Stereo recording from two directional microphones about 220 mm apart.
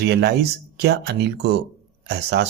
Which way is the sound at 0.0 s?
50° right (ahead or behind).